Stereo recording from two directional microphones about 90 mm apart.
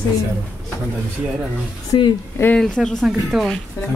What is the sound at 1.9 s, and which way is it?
Speech, 60° left (ahead or behind).